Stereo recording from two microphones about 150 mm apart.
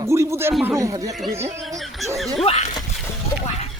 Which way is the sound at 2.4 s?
45° left (ahead or behind).